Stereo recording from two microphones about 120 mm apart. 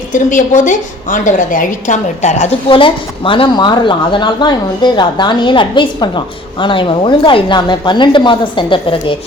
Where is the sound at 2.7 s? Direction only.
45° left (ahead or behind).